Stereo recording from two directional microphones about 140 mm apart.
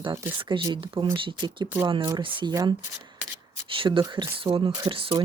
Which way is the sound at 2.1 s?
35° right (ahead or behind).